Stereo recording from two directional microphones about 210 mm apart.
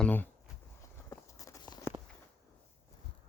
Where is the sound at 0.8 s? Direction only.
15° left (ahead or behind).